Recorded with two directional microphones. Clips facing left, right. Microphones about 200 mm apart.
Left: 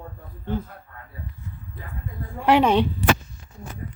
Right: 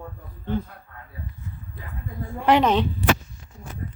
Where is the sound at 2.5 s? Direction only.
10° left (ahead or behind).